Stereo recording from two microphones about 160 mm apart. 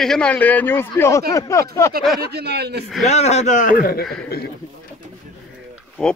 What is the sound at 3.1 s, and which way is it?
Speech, 45° left (ahead or behind).